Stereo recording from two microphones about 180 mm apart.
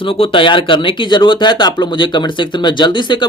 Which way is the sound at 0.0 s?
30° left (ahead or behind).